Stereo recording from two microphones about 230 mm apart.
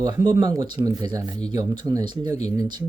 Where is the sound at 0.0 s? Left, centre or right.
Centre.